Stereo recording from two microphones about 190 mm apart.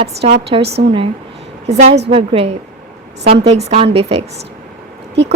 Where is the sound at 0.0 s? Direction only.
30° right (ahead or behind).